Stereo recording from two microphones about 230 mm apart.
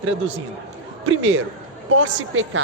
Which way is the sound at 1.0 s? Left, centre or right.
Right.